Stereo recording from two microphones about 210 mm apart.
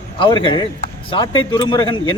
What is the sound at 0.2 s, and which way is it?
Speech, 25° left (ahead or behind).